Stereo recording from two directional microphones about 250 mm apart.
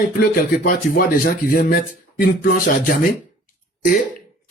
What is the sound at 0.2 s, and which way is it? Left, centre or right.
Speech, left.